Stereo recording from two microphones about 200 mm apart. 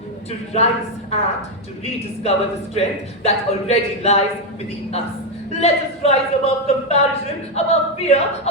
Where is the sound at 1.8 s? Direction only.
30° left (ahead or behind).